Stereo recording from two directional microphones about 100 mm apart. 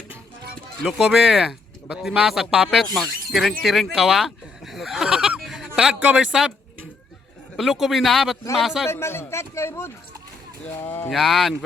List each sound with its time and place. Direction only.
0.8 s speech: centre (ahead or behind)
7.5 s speech: centre (ahead or behind)
8.9 s speech: 25° left (ahead or behind)
11.1 s speech: centre (ahead or behind)